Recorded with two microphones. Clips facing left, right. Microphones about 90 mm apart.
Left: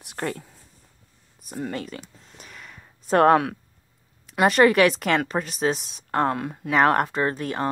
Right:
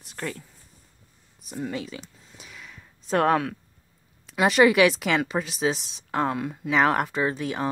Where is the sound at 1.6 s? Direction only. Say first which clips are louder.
Left 1 dB; centre (ahead or behind).